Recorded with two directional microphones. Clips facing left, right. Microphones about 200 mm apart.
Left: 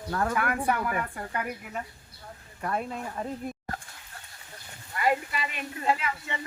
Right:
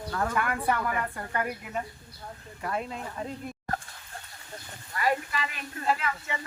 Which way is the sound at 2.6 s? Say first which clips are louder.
Left 2 dB; 50° left (ahead or behind).